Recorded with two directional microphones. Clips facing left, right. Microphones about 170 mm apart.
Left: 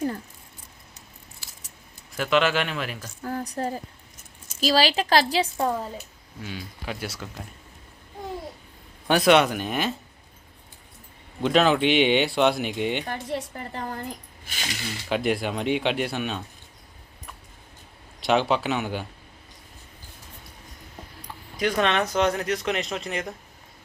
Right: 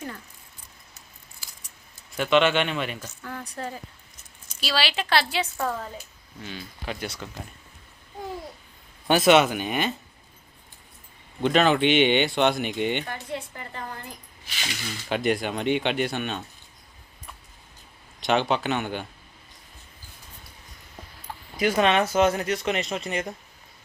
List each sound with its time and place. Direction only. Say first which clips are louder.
2.1 s speech: right 2 dB; centre (ahead or behind)
3.2 s a woman's voice: left 10 dB; 35° left (ahead or behind)
5.6 s speech: left 3 dB; 15° left (ahead or behind)
9.0 s speech: even; centre (ahead or behind)
11.4 s speech: even; centre (ahead or behind)
13.1 s a woman's voice: left 3 dB; 40° left (ahead or behind)
15.1 s speech: even; centre (ahead or behind)
18.2 s speech: left 1 dB; centre (ahead or behind)
21.6 s speech: right 2 dB; 5° right (ahead or behind)